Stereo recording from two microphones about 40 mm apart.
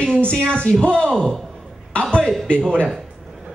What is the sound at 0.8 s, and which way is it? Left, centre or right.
Speech, left.